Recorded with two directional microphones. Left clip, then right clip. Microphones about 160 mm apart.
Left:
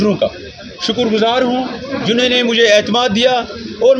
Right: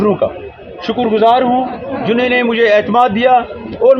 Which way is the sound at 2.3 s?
20° left (ahead or behind).